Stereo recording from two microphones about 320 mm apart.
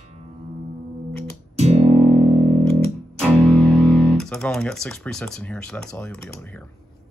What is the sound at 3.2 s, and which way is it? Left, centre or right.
Speech, centre.